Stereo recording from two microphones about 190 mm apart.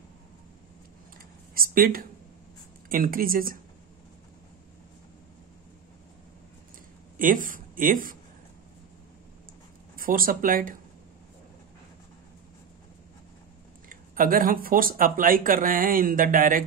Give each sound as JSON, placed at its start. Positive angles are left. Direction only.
{"t": 1.5, "sound": "speech", "side_deg": -50}
{"t": 7.2, "sound": "speech", "side_deg": -45}
{"t": 9.9, "sound": "speech", "side_deg": -50}
{"t": 13.8, "sound": "speech", "side_deg": -45}